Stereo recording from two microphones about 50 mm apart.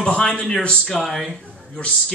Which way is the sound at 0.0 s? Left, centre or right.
Centre.